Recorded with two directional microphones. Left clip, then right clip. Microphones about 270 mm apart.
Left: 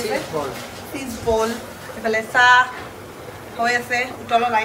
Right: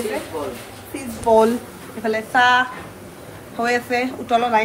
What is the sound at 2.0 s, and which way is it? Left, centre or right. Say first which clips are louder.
Speech: left 1 dB; centre.